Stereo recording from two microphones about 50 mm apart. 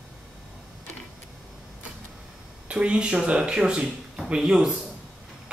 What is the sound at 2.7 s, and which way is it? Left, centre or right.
Speech, right.